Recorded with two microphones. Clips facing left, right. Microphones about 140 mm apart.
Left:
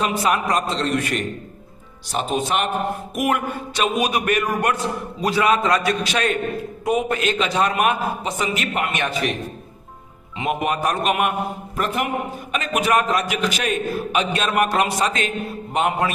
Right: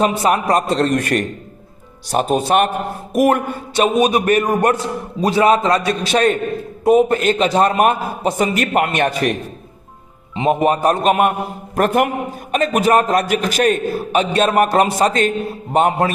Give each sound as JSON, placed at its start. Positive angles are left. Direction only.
{"t": 0.0, "sound": "a man's voice", "side_deg": -35}
{"t": 0.8, "sound": "a man's voice", "side_deg": -50}
{"t": 3.2, "sound": "a man's voice", "side_deg": -35}
{"t": 10.3, "sound": "a man's voice", "side_deg": -30}
{"t": 11.8, "sound": "a man's voice", "side_deg": -50}